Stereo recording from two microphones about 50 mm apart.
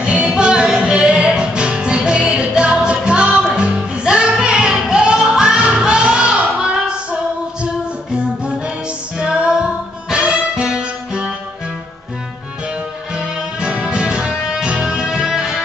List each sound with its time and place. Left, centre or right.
0.0 s music: centre
9.2 s music: centre
13.1 s music: centre